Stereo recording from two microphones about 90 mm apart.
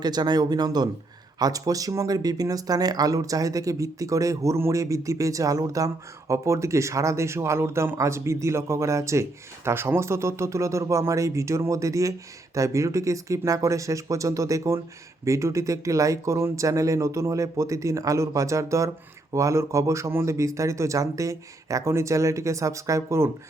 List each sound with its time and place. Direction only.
0.0 s speech: 50° right (ahead or behind); by 23.3 s 30° right (ahead or behind)